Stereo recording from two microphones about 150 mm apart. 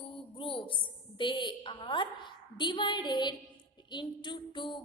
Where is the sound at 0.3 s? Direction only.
35° left (ahead or behind).